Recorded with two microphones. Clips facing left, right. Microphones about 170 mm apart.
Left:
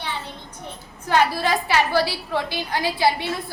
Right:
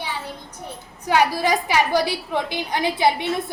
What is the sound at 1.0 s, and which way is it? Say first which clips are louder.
A woman's voice: right 1 dB; 15° right (ahead or behind).